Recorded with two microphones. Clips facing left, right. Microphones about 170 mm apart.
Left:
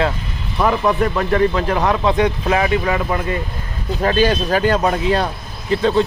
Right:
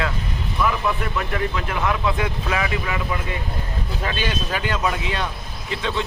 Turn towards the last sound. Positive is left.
turn(degrees=40)  # may be behind; listen again after turning